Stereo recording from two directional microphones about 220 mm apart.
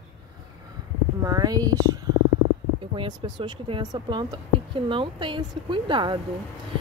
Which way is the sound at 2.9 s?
20° right (ahead or behind).